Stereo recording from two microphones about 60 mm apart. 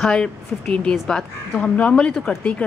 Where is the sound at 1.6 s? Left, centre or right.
Centre.